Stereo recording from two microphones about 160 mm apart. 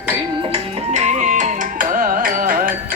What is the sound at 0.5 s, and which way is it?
Music, 45° right (ahead or behind).